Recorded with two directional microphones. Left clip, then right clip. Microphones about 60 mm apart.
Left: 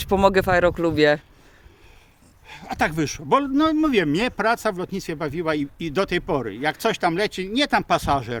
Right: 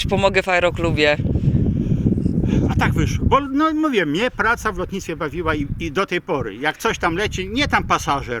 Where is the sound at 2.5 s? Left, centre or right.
Left.